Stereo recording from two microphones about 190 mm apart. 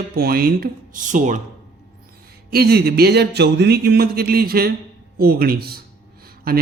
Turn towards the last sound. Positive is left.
turn(degrees=-50)  # may be behind; listen again after turning